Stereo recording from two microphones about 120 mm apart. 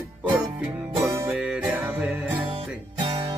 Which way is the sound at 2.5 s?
45° right (ahead or behind).